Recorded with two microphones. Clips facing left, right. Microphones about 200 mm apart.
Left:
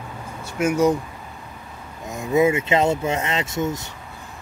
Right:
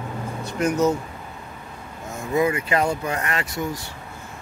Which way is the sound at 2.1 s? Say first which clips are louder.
Left 3 dB; 20° left (ahead or behind).